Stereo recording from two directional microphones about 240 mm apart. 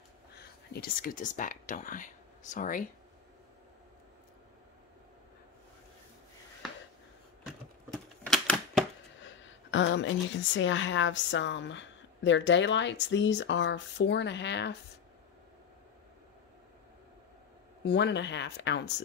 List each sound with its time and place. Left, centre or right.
0.7 s speech: left
7.9 s typewriter: centre
9.2 s a woman's voice: left
17.8 s a woman's voice: left